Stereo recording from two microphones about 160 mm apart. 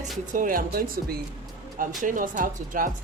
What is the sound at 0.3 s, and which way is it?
Speech, 60° right (ahead or behind).